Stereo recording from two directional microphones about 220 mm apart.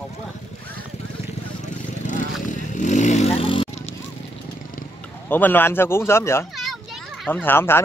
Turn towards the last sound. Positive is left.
turn(degrees=10)  # may be behind; listen again after turning